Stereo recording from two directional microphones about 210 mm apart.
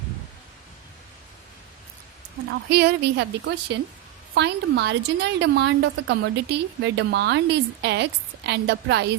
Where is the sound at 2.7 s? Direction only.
50° right (ahead or behind).